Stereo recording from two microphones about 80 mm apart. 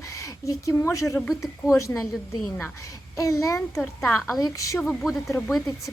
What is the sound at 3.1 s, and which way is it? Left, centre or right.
Speech, left.